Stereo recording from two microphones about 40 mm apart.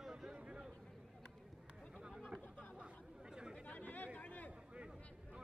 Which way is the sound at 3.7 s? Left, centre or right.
Left.